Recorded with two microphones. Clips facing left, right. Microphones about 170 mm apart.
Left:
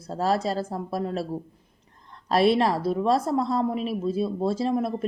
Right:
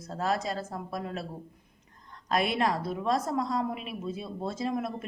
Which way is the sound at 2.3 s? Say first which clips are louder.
Left 7 dB; 30° left (ahead or behind).